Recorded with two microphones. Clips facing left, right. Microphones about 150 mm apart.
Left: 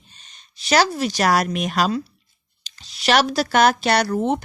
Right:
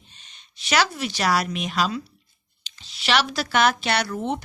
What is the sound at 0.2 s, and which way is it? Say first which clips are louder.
Speech: left 1 dB; 40° left (ahead or behind).